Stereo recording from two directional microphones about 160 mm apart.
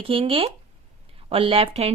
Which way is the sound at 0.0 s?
35° right (ahead or behind).